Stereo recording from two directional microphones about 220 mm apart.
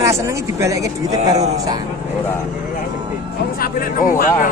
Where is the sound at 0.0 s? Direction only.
15° right (ahead or behind).